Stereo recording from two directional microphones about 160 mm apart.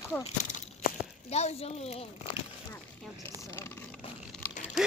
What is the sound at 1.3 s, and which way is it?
Speech, 45° left (ahead or behind).